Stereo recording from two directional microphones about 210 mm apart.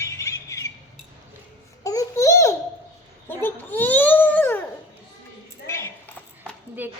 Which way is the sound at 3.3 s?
10° left (ahead or behind).